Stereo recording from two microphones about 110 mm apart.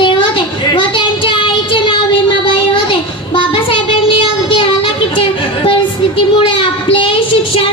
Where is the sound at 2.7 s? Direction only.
50° left (ahead or behind).